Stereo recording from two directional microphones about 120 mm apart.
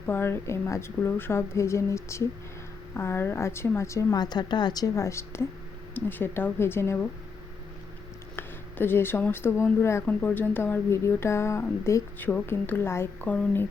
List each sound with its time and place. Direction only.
0.0 s a woman's voice: 20° left (ahead or behind)
8.4 s a woman's voice: 20° left (ahead or behind)